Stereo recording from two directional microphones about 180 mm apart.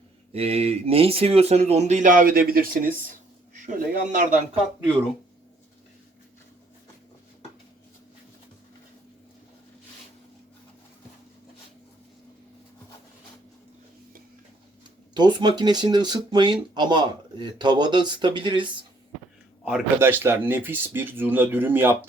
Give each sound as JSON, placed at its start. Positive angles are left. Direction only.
{"t": 0.3, "sound": "a man's voice", "side_deg": -35}
{"t": 15.1, "sound": "speech", "side_deg": -25}
{"t": 19.6, "sound": "speech", "side_deg": -10}